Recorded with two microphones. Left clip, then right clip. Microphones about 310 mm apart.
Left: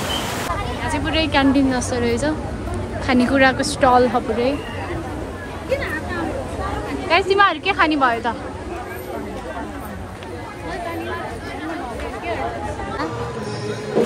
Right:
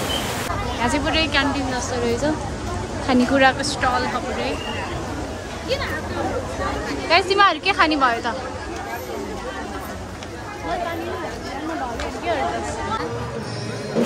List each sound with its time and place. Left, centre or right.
0.0 s a sound: centre
0.9 s a woman's voice: centre
1.7 s a woman's voice: left
7.1 s a woman's voice: centre